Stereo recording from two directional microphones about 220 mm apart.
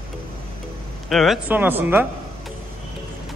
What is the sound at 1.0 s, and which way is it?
Speech, centre (ahead or behind).